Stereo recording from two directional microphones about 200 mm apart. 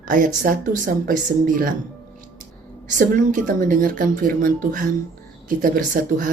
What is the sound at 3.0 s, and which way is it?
A woman's voice, 40° right (ahead or behind).